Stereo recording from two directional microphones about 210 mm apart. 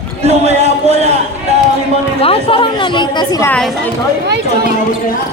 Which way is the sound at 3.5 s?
Centre (ahead or behind).